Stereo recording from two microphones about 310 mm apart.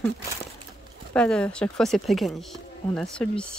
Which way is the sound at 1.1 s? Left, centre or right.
Centre.